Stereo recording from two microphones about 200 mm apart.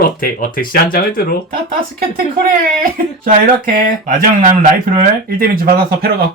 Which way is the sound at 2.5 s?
45° right (ahead or behind).